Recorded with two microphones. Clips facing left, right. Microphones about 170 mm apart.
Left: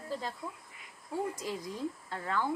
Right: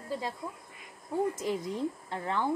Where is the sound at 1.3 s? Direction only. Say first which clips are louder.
Right 6 dB; 25° right (ahead or behind).